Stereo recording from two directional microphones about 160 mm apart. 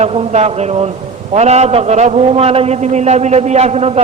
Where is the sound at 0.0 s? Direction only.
40° right (ahead or behind).